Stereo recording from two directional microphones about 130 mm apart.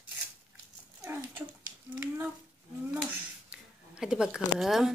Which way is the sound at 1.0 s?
15° right (ahead or behind).